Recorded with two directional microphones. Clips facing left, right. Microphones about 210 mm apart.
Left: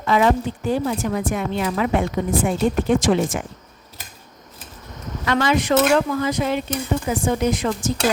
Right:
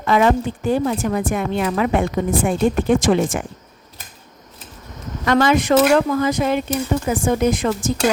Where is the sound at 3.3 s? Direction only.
55° right (ahead or behind).